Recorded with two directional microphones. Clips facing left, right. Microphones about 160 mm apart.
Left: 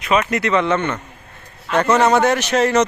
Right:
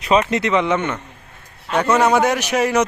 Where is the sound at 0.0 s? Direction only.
30° right (ahead or behind).